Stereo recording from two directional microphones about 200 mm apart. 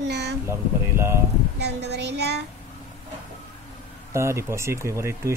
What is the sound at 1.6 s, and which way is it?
Speech, 55° right (ahead or behind).